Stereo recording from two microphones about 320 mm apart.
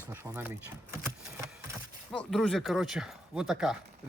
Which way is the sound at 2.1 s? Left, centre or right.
Centre.